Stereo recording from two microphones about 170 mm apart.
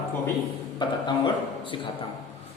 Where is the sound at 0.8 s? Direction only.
25° left (ahead or behind).